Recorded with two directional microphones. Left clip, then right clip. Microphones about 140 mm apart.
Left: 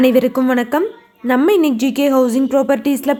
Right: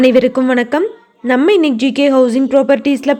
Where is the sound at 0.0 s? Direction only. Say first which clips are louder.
Right 3 dB; 25° right (ahead or behind).